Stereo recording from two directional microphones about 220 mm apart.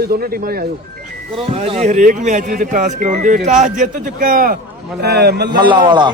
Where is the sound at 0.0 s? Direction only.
45° right (ahead or behind).